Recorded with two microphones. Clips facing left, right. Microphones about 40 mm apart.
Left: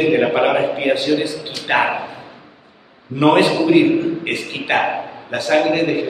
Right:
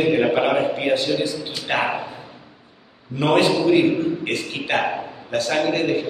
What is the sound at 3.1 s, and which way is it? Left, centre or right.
A man's voice, left.